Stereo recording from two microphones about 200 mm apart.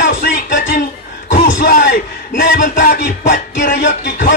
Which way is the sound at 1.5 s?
50° left (ahead or behind).